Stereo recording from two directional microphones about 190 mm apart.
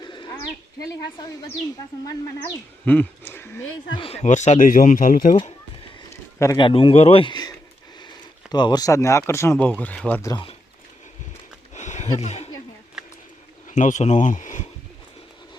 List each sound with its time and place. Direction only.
0.0 s bird: 25° left (ahead or behind)
2.0 s speech: 10° left (ahead or behind)
3.6 s speech: 90° left
3.9 s speech: 30° left (ahead or behind)
6.1 s a sound: 15° left (ahead or behind)
6.7 s speech: 30° left (ahead or behind)
8.5 s speech: 20° left (ahead or behind)
11.7 s a sound: 40° left (ahead or behind)
12.1 s speech: 35° left (ahead or behind)
13.0 s bird: 5° right (ahead or behind)
13.7 s speech: 40° left (ahead or behind)